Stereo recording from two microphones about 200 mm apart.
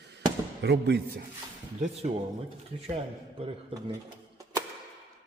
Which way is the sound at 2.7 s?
35° right (ahead or behind).